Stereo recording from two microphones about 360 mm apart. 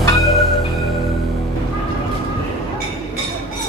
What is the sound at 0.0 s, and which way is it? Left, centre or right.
Music, centre.